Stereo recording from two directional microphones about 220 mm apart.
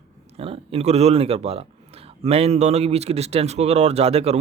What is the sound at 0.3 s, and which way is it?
Speech, 25° right (ahead or behind).